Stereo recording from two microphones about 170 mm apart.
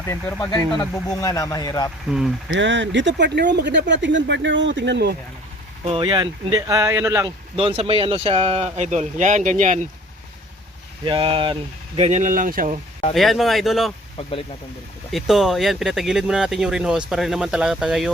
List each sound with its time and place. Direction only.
0.0 s speech: 15° left (ahead or behind)
2.0 s speech: 5° right (ahead or behind)
2.5 s speech: 90° right
5.8 s speech: 30° right (ahead or behind); by 7.3 s 15° right (ahead or behind)
7.5 s speech: 35° right (ahead or behind)
11.0 s speech: 30° right (ahead or behind); by 12.8 s 50° right (ahead or behind)
13.1 s speech: centre (ahead or behind)
14.2 s speech: 35° left (ahead or behind)
15.1 s speech: centre (ahead or behind)